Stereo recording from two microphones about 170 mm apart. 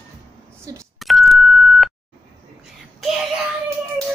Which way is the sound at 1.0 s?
Centre (ahead or behind).